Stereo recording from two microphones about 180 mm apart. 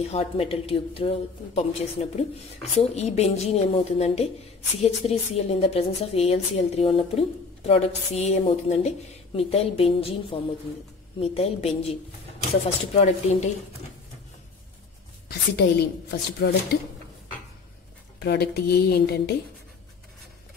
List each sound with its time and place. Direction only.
0.1 s a woman's voice: 35° left (ahead or behind)
15.2 s a woman's voice: 65° left (ahead or behind)
18.2 s speech: 65° left (ahead or behind)